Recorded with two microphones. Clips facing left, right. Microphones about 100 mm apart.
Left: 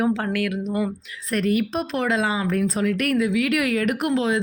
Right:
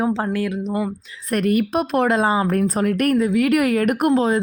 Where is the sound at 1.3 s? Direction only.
50° right (ahead or behind).